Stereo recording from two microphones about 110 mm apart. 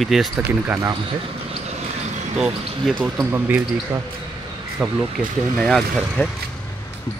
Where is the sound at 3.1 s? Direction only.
20° right (ahead or behind).